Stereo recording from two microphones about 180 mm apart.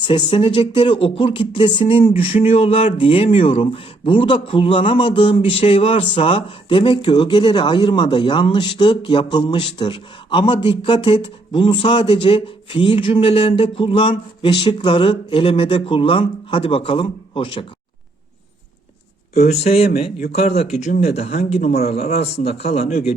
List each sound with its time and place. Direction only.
0.1 s speech: 30° left (ahead or behind)
19.4 s a man's voice: 35° left (ahead or behind)